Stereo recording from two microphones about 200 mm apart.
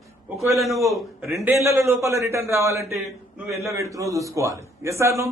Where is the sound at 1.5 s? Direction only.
15° right (ahead or behind).